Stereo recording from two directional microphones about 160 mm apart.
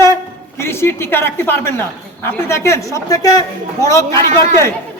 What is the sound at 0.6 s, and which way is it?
A woman's voice, 15° left (ahead or behind).